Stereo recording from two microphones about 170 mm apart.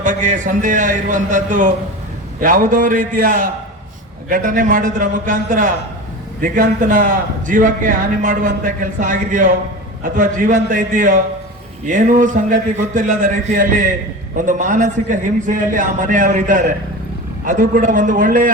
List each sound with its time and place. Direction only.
0.0 s a man's voice: 50° right (ahead or behind)